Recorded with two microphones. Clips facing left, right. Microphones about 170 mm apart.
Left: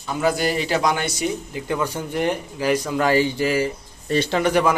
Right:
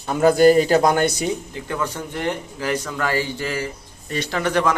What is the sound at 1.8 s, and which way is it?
A man's voice, 10° left (ahead or behind).